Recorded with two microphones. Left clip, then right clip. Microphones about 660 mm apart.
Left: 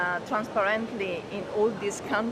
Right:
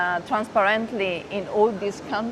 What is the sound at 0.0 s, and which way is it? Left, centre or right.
Speech, right.